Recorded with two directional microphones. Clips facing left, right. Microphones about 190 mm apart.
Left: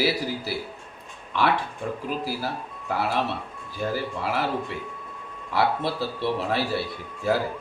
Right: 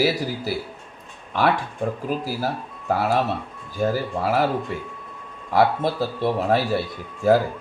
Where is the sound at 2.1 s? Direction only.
45° right (ahead or behind).